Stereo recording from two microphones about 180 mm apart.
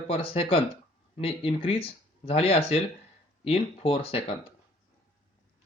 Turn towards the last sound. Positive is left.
turn(degrees=35)  # may be behind; listen again after turning